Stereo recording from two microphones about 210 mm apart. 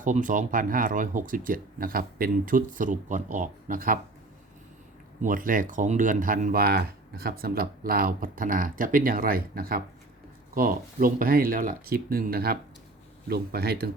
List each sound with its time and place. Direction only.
0.0 s speech: 40° right (ahead or behind)
5.2 s speech: 40° right (ahead or behind)